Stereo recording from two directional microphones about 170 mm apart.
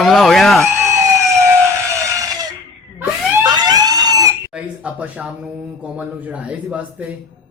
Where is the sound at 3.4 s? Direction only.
25° right (ahead or behind).